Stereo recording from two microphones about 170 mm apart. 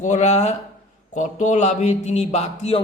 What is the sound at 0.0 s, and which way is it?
A man's voice, 45° left (ahead or behind).